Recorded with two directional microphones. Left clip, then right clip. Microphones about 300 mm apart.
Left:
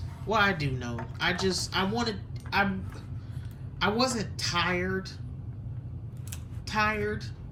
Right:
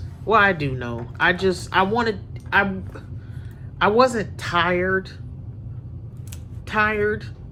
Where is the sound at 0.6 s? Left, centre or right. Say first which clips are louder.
Right 7 dB; centre.